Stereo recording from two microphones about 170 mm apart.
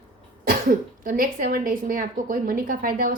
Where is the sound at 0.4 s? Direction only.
55° right (ahead or behind).